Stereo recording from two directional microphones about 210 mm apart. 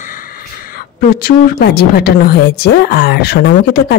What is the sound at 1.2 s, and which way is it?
A woman's voice, 45° left (ahead or behind).